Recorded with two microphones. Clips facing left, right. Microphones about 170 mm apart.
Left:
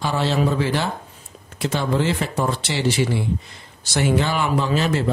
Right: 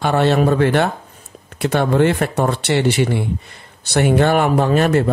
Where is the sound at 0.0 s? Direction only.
60° right (ahead or behind).